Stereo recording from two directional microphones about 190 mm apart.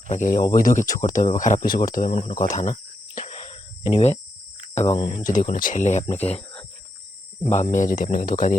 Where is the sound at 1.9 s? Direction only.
35° left (ahead or behind).